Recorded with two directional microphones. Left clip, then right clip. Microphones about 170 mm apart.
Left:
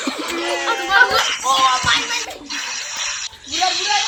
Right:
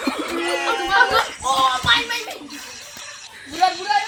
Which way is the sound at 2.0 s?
50° left (ahead or behind).